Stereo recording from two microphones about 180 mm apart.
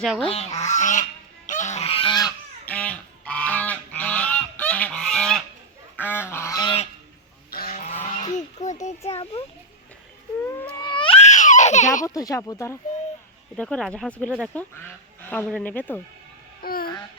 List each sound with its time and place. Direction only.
0.0 s speech: centre (ahead or behind)
0.3 s goose: 35° left (ahead or behind)
0.6 s speech: 40° left (ahead or behind)
1.5 s goose: 40° left (ahead or behind); by 2.3 s 25° left (ahead or behind)
2.6 s goose: 5° left (ahead or behind)
6.0 s speech: 10° left (ahead or behind)
6.3 s goose: 15° left (ahead or behind)
7.7 s a sound: 40° left (ahead or behind)
9.0 s goose: 35° left (ahead or behind)
10.8 s baby cry: 25° left (ahead or behind); by 12.0 s 45° left (ahead or behind)
12.0 s speech: 20° left (ahead or behind)
13.6 s speech: 5° left (ahead or behind)
16.6 s speech: 55° left (ahead or behind)